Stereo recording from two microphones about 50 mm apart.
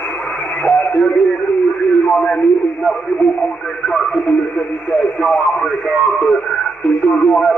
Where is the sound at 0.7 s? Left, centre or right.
Left.